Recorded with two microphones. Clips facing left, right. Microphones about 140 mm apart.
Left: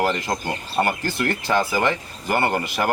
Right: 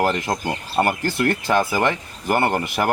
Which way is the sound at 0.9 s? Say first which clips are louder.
Right 3 dB; 15° right (ahead or behind).